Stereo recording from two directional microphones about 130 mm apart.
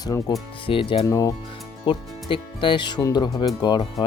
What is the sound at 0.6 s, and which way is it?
Speech, 45° left (ahead or behind).